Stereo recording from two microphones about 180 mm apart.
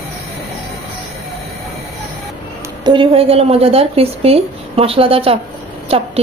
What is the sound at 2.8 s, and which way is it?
A woman's voice, 25° right (ahead or behind).